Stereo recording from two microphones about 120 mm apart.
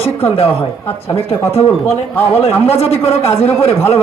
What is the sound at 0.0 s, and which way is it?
Speech, 55° left (ahead or behind).